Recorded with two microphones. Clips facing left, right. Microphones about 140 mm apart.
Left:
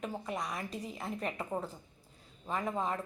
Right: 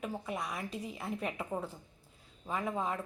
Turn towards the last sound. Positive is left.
turn(degrees=-5)  # may be behind; listen again after turning